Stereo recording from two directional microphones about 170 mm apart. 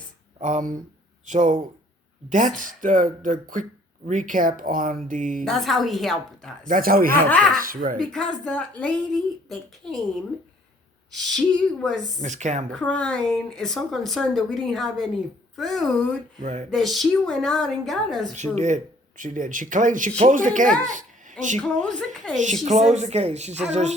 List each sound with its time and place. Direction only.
0.3 s speech: 45° right (ahead or behind)
5.5 s speech: centre (ahead or behind)
6.7 s speech: 55° right (ahead or behind)
7.3 s speech: 5° left (ahead or behind)
7.5 s speech: 55° right (ahead or behind)
7.9 s speech: 5° left (ahead or behind)
11.3 s speech: 5° left (ahead or behind)
12.2 s speech: 45° right (ahead or behind)
12.7 s speech: 5° left (ahead or behind)
16.4 s speech: 45° right (ahead or behind)
16.7 s speech: centre (ahead or behind)
18.5 s speech: 45° right (ahead or behind)
21.6 s speech: 5° left (ahead or behind)
22.6 s speech: 40° right (ahead or behind)